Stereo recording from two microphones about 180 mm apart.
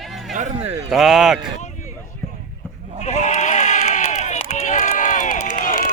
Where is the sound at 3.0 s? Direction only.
40° left (ahead or behind).